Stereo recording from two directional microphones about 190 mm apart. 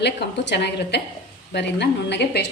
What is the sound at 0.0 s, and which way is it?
A woman's voice, 60° left (ahead or behind).